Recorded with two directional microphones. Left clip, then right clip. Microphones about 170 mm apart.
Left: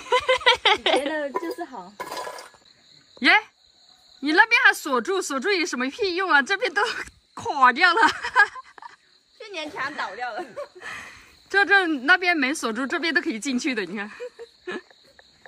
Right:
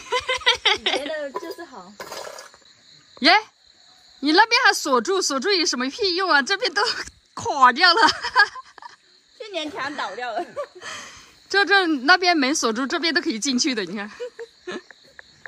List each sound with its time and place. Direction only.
0.0 s a sound: centre (ahead or behind)
4.2 s speech: 15° right (ahead or behind)
9.4 s a woman's voice: 70° right (ahead or behind)
10.8 s speech: 10° right (ahead or behind)
14.6 s cricket: 5° right (ahead or behind)